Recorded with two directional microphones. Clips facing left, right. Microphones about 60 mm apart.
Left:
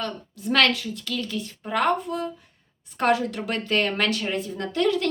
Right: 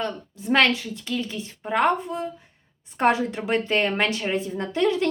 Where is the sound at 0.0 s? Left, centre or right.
Right.